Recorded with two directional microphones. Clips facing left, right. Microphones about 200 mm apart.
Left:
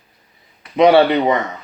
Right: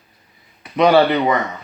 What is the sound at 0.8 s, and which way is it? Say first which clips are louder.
Speech: left 2 dB; 25° left (ahead or behind).